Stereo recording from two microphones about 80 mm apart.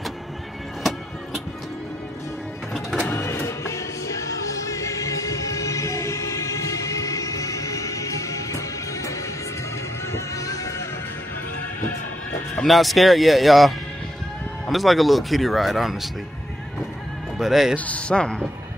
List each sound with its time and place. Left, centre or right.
3.0 s music: left
12.6 s speech: centre
17.4 s speech: centre
17.7 s speech: centre